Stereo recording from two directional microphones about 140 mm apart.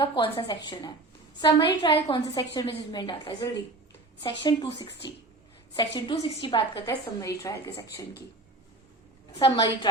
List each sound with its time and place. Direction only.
0.0 s a woman's voice: 35° left (ahead or behind)
6.8 s a woman's voice: 20° left (ahead or behind)
9.4 s a woman's voice: 40° left (ahead or behind)